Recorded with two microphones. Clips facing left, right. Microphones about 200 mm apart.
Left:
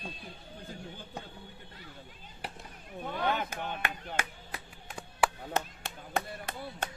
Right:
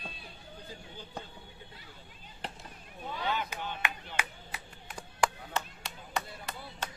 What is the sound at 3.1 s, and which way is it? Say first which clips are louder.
Chop: left 3 dB; 55° left (ahead or behind).